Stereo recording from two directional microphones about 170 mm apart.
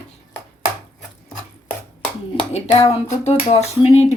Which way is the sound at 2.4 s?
40° left (ahead or behind).